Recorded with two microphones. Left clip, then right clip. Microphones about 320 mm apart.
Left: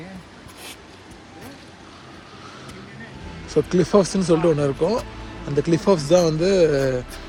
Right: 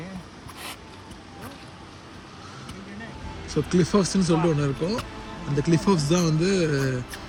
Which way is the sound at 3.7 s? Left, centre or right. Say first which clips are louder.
Left 4 dB; centre.